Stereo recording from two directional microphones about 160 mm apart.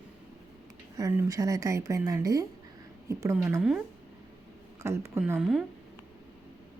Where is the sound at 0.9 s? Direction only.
20° right (ahead or behind).